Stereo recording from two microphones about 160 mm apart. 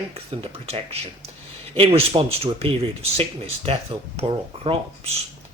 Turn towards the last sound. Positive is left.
turn(degrees=-35)  # may be behind; listen again after turning